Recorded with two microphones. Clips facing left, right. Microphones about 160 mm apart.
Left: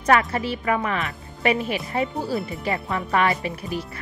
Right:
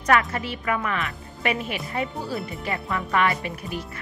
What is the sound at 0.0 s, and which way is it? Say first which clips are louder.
Speech: left 2 dB; 30° left (ahead or behind).